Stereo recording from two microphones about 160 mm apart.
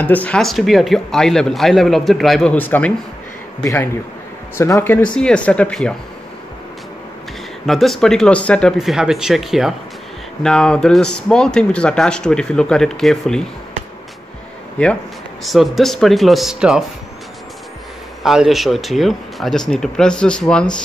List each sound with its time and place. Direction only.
0.0 s speech: 10° left (ahead or behind)
7.6 s speech: centre (ahead or behind)
15.4 s speech: centre (ahead or behind)
18.2 s speech: centre (ahead or behind)